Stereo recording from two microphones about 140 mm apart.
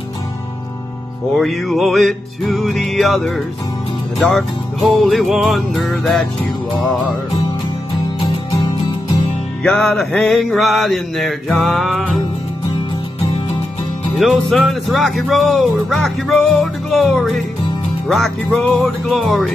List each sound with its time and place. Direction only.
1.3 s speech: centre (ahead or behind)
8.2 s music: 40° left (ahead or behind)
9.6 s speech: 5° left (ahead or behind)
14.1 s speech: centre (ahead or behind)